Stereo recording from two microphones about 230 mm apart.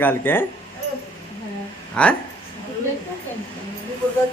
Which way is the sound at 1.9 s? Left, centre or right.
Centre.